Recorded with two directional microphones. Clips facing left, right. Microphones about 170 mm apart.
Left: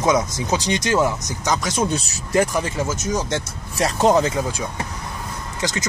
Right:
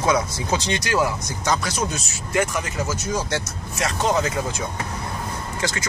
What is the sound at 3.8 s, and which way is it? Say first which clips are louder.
Speech: left 5 dB; 35° left (ahead or behind).